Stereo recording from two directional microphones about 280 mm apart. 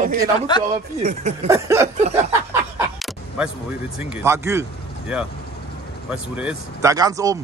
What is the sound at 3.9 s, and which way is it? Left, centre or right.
Speech, centre.